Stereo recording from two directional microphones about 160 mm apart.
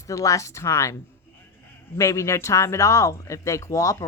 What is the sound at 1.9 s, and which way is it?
A woman's voice, 20° left (ahead or behind).